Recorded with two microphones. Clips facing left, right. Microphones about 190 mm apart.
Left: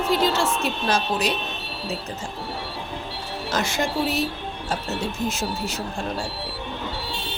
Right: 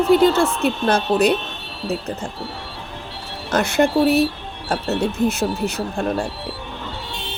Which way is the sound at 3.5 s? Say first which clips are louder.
Right 8 dB; 60° right (ahead or behind).